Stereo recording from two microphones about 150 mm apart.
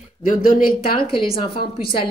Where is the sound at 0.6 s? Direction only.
75° left (ahead or behind).